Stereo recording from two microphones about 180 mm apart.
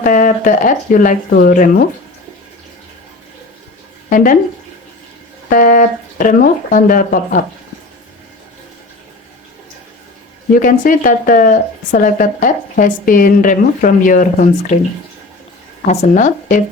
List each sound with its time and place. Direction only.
0.0 s speech: 45° left (ahead or behind)
4.1 s speech: 50° left (ahead or behind)
5.5 s speech: 50° left (ahead or behind)
10.6 s speech: 50° left (ahead or behind)
15.9 s speech: 40° left (ahead or behind)